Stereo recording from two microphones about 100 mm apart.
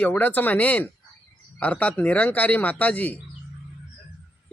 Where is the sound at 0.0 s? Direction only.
20° left (ahead or behind).